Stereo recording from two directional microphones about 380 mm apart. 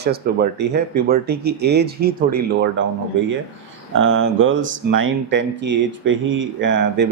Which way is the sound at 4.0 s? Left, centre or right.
Right.